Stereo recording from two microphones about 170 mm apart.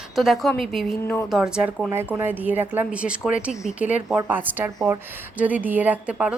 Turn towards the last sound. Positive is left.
turn(degrees=-5)  # may be behind; listen again after turning